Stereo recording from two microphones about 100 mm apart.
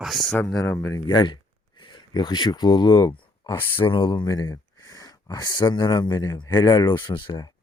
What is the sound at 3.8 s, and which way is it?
Speech, 55° left (ahead or behind).